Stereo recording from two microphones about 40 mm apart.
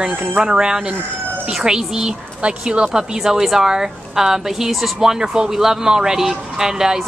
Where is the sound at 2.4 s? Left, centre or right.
Right.